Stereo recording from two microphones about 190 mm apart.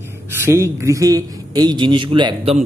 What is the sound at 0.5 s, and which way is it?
Speech, 15° right (ahead or behind).